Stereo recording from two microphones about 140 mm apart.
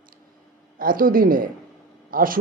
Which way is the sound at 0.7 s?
90° right.